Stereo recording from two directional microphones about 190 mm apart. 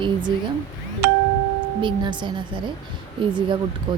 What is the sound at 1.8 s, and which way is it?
Speech, 25° right (ahead or behind).